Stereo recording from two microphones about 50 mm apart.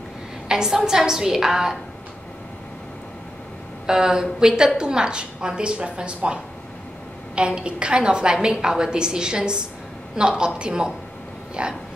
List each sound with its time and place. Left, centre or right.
0.5 s a woman's voice: centre
3.8 s a woman's voice: centre
11.6 s a sound: centre